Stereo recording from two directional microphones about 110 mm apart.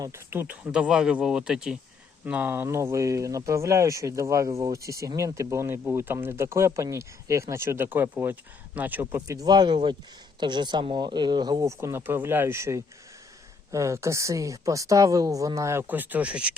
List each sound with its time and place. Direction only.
0.0 s speech: 20° right (ahead or behind); by 1.8 s 5° right (ahead or behind)
2.2 s speech: 15° right (ahead or behind)
9.2 s speech: 30° right (ahead or behind)
11.8 s speech: 20° right (ahead or behind)